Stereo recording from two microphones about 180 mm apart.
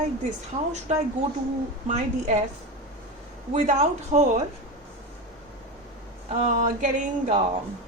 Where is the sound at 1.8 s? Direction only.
40° right (ahead or behind).